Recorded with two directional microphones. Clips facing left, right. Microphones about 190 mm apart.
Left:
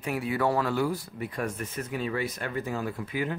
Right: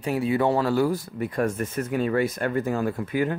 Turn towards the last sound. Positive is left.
turn(degrees=-50)  # may be behind; listen again after turning